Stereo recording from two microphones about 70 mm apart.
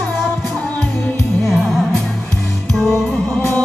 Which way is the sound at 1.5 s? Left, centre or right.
Centre.